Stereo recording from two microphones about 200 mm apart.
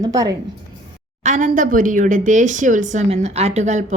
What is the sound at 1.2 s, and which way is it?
Speech, 40° right (ahead or behind).